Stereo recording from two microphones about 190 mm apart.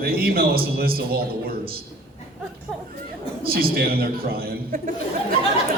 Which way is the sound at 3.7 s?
55° right (ahead or behind).